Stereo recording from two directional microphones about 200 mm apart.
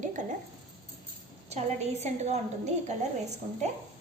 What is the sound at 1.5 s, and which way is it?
Speech, 35° right (ahead or behind).